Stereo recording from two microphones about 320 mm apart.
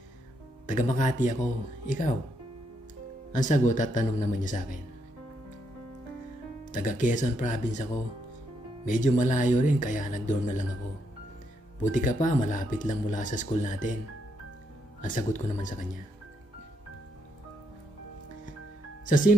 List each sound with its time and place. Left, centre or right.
0.7 s speech: left
3.3 s speech: left
6.7 s speech: left
8.8 s speech: left
11.8 s speech: left
15.0 s speech: left
19.0 s speech: left